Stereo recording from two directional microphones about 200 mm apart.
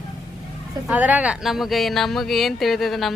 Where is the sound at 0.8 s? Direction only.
5° right (ahead or behind).